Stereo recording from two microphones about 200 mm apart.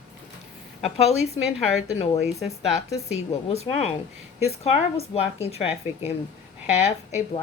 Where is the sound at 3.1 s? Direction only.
30° left (ahead or behind).